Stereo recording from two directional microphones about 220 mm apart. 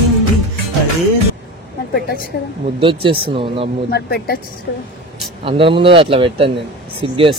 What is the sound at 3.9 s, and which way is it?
Speech, 45° left (ahead or behind).